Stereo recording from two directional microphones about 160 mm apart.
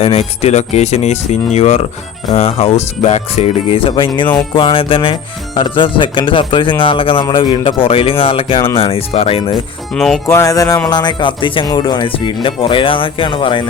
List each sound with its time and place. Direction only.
0.0 s speech: 40° left (ahead or behind)
9.9 s music: 5° left (ahead or behind)
10.2 s music: 20° left (ahead or behind)
10.8 s speech: 25° left (ahead or behind)